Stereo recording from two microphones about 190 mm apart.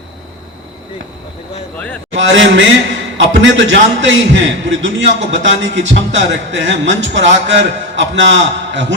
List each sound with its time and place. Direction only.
1.7 s a man's voice: 5° left (ahead or behind)
2.1 s a man's voice: 80° right